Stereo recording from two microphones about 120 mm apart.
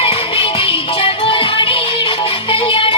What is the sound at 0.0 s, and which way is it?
Music, 50° left (ahead or behind).